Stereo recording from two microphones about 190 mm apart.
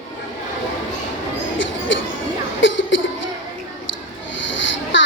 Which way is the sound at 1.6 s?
80° left.